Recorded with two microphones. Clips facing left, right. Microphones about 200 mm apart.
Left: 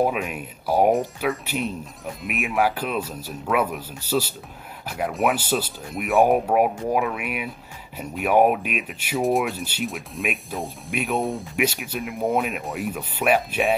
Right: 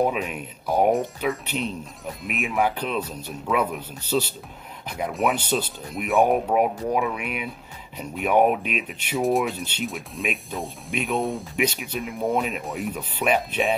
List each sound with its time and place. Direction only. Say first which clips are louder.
0.0 s speech: left 1 dB; 5° left (ahead or behind)